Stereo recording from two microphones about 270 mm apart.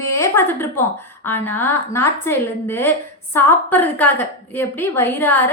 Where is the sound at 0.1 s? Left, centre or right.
Centre.